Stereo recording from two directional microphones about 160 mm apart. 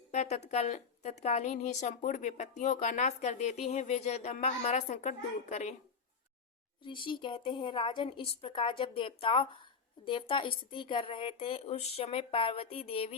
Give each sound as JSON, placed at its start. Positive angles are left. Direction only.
{"t": 0.1, "sound": "a woman's voice", "side_deg": 45}
{"t": 6.8, "sound": "speech", "side_deg": 30}